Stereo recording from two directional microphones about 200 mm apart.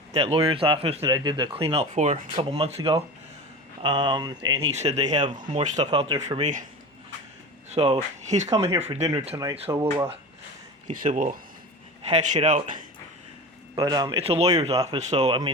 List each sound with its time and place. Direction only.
0.1 s speech: 30° right (ahead or behind)
4.8 s speech: 35° right (ahead or behind)
5.7 s speech: 25° right (ahead or behind)
6.4 s speech: 40° right (ahead or behind)
7.7 s speech: 30° right (ahead or behind)
8.4 s speech: 15° right (ahead or behind)
8.9 s speech: 30° right (ahead or behind)
9.3 s speech: 15° right (ahead or behind)
10.8 s speech: 40° right (ahead or behind)
13.7 s speech: 20° right (ahead or behind)
14.7 s speech: 15° right (ahead or behind)
14.9 s speech: 35° right (ahead or behind)